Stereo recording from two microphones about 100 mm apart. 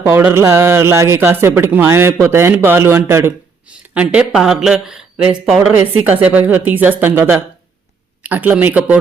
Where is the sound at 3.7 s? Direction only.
10° right (ahead or behind).